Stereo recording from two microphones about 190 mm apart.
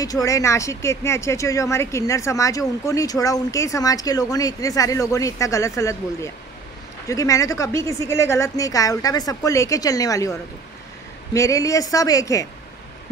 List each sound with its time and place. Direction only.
0.0 s speech: 20° left (ahead or behind)
11.3 s speech: 15° left (ahead or behind)